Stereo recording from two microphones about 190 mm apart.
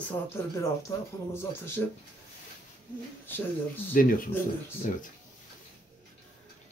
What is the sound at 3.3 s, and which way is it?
Speech, 10° left (ahead or behind).